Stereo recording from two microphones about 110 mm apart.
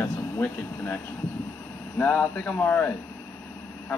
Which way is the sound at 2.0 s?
10° left (ahead or behind).